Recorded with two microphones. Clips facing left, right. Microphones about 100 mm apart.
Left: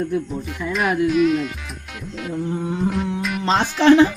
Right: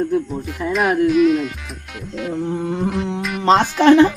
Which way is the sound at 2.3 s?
65° right (ahead or behind).